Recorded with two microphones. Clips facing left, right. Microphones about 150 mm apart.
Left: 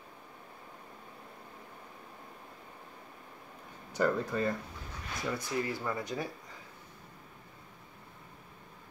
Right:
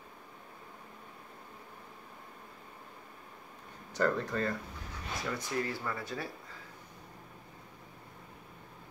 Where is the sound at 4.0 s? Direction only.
10° left (ahead or behind).